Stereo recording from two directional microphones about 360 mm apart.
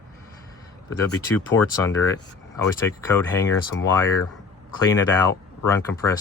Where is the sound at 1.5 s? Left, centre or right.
Left.